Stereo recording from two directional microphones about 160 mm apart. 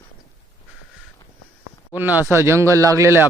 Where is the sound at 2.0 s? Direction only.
10° right (ahead or behind).